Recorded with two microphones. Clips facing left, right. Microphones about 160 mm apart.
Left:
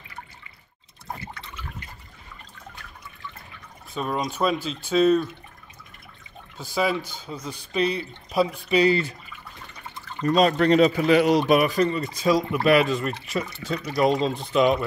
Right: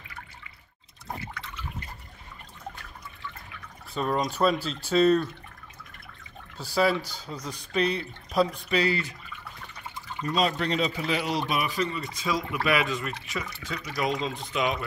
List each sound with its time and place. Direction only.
3.9 s speech: 5° left (ahead or behind)
6.8 s speech: 20° left (ahead or behind)
7.2 s speech: centre (ahead or behind)
10.2 s a man's voice: 50° left (ahead or behind); by 14.9 s 35° left (ahead or behind)